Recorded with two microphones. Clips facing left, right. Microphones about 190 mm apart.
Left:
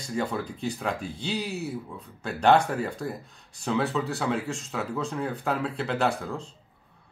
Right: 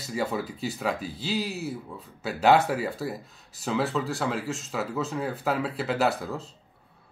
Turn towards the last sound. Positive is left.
turn(degrees=-5)  # may be behind; listen again after turning